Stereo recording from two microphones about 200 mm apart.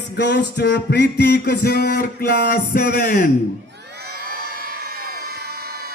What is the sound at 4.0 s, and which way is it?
Crowd, 50° right (ahead or behind).